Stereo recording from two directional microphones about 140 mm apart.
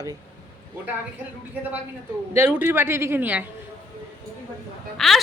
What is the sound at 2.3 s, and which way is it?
A man's voice, 15° right (ahead or behind).